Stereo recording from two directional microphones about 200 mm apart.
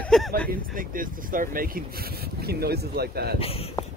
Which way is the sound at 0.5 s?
45° right (ahead or behind).